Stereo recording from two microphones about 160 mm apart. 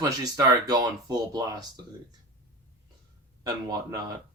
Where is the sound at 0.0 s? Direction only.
25° right (ahead or behind).